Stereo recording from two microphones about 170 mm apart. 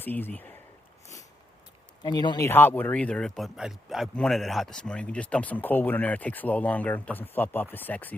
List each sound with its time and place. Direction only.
0.0 s speech: 10° left (ahead or behind)
2.0 s speech: 25° left (ahead or behind)
2.5 s speech: 10° left (ahead or behind)